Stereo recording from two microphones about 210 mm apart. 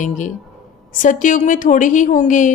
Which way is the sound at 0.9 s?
40° left (ahead or behind).